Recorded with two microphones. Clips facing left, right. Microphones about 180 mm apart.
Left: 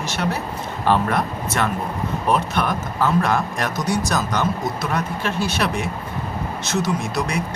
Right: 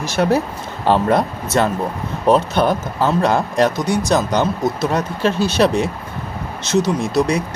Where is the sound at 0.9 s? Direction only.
30° right (ahead or behind).